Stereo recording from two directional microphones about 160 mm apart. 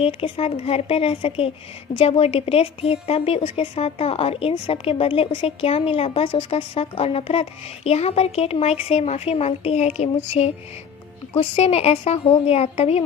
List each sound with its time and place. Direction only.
0.0 s speech: 35° left (ahead or behind)